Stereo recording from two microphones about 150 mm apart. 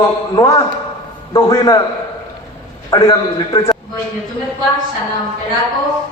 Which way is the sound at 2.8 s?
25° left (ahead or behind).